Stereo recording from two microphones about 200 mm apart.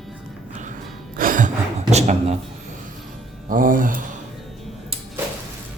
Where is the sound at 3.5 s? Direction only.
45° right (ahead or behind).